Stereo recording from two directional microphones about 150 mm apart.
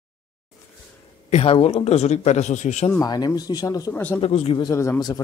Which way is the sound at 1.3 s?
40° left (ahead or behind).